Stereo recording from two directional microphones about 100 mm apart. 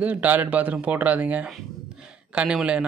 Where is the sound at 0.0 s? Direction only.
15° right (ahead or behind).